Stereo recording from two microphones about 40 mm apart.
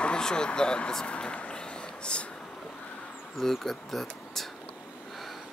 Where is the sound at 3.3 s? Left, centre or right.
Centre.